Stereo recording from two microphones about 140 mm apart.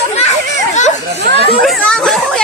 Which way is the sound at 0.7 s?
50° left (ahead or behind).